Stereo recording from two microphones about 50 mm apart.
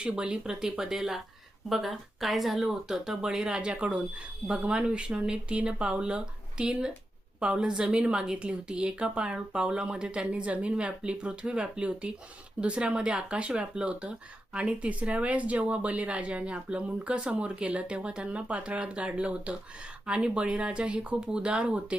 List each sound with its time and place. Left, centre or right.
0.0 s speech: centre